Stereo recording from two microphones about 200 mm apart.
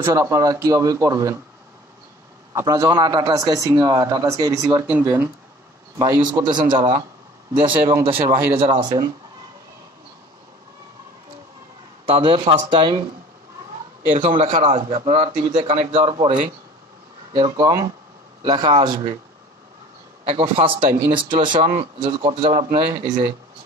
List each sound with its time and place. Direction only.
0.0 s a man's voice: 15° right (ahead or behind)
2.5 s a man's voice: 20° right (ahead or behind)
5.9 s speech: 20° right (ahead or behind)
8.3 s a man's voice: 10° right (ahead or behind)
8.5 s speech: 30° right (ahead or behind)
12.1 s speech: 25° right (ahead or behind)
14.1 s speech: 30° right (ahead or behind)
17.3 s a man's voice: 20° right (ahead or behind)
20.2 s speech: 30° right (ahead or behind)
21.5 s speech: 40° right (ahead or behind)
21.9 s speech: 25° right (ahead or behind)